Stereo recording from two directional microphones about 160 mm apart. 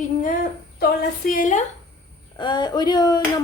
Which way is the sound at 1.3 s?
55° left (ahead or behind).